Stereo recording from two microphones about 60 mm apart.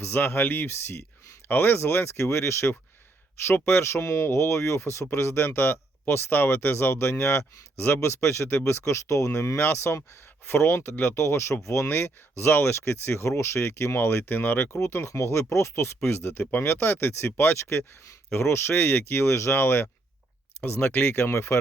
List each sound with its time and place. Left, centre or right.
0.0 s speech: left
14.7 s speech: left
20.6 s speech: left
21.2 s speech: left